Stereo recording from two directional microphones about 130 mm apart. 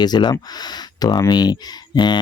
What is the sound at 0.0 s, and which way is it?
Speech, 30° left (ahead or behind).